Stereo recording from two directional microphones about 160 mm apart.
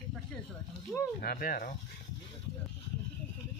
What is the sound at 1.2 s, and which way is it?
Speech, 65° left (ahead or behind).